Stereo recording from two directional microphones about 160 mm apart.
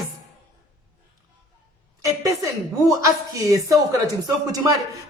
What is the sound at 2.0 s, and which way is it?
A woman's voice, 20° right (ahead or behind).